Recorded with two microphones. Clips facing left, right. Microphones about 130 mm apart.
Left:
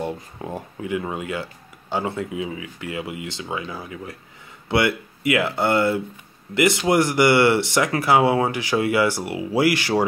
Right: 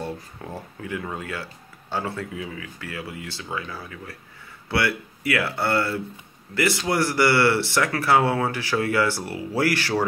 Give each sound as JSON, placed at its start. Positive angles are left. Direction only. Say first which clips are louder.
{"t": 0.0, "sound": "speech", "louder": "left 4 dB", "side_deg": 15}